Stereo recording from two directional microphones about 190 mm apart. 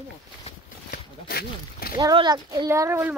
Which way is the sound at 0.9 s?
50° left (ahead or behind).